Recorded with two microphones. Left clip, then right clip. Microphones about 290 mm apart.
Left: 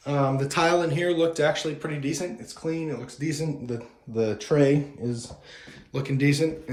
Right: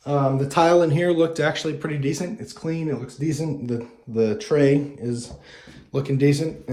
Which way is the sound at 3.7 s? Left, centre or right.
Right.